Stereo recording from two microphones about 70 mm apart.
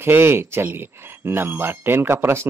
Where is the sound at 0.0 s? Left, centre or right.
Right.